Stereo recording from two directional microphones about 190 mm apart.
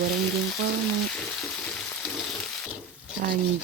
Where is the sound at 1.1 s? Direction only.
5° left (ahead or behind).